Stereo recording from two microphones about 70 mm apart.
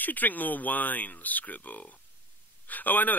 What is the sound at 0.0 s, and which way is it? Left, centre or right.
Speech, left.